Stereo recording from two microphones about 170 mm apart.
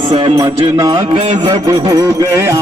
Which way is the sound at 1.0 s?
35° right (ahead or behind).